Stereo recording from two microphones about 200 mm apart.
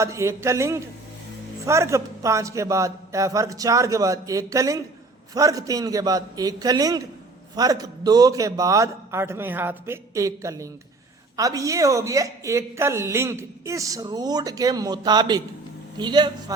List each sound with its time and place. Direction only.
0.0 s a woman's voice: 15° right (ahead or behind)